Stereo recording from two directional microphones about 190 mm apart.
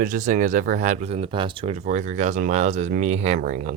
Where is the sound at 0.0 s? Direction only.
45° right (ahead or behind).